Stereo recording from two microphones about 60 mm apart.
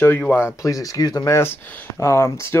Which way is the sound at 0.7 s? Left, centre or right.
Left.